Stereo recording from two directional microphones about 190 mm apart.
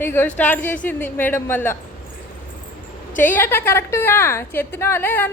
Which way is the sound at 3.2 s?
10° left (ahead or behind).